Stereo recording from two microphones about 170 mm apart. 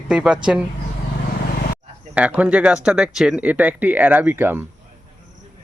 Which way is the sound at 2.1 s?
10° right (ahead or behind).